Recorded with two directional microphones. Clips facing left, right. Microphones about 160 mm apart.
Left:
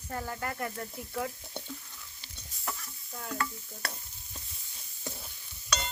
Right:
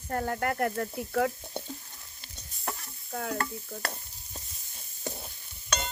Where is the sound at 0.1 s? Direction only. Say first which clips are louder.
Right 6 dB; 55° right (ahead or behind); by 1.3 s 70° right (ahead or behind).